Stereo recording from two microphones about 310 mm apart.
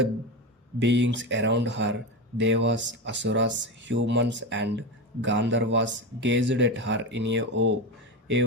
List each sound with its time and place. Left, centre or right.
0.8 s speech: right